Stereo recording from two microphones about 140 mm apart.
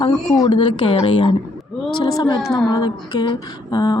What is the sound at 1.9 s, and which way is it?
Speech, 30° left (ahead or behind).